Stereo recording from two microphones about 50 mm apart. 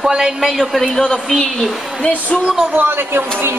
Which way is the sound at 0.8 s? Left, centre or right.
Centre.